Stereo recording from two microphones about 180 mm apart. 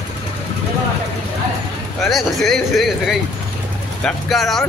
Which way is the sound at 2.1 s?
Centre (ahead or behind).